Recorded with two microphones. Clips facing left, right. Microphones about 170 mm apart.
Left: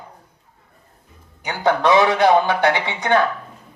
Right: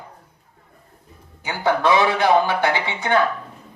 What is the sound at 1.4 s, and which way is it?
Speech, 20° left (ahead or behind).